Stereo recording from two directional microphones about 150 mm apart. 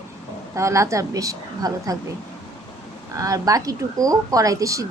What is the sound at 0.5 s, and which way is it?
A woman's voice, 20° right (ahead or behind).